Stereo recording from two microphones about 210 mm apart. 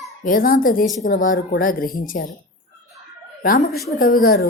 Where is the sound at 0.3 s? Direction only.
40° left (ahead or behind).